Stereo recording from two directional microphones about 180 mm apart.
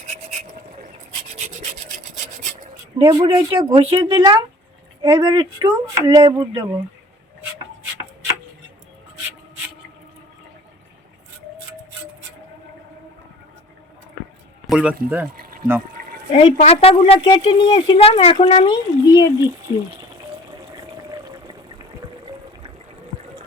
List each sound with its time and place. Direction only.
0.1 s a sound: 40° right (ahead or behind)
1.3 s filing: 40° right (ahead or behind)
3.0 s speech: 25° right (ahead or behind)
14.7 s speech: 5° right (ahead or behind)
15.4 s a sound: 55° right (ahead or behind)
16.3 s a woman's voice: 35° left (ahead or behind)
19.7 s speech: 15° right (ahead or behind)